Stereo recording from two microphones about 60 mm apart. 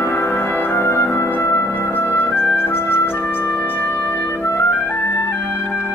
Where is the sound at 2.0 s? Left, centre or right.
Left.